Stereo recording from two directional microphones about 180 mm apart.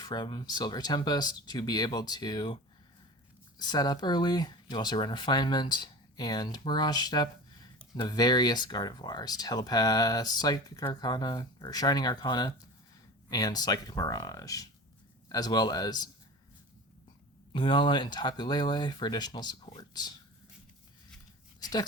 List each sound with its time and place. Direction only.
0.0 s speech: 25° left (ahead or behind)
3.6 s speech: 25° left (ahead or behind)
17.5 s speech: 25° left (ahead or behind)
21.6 s speech: 20° left (ahead or behind)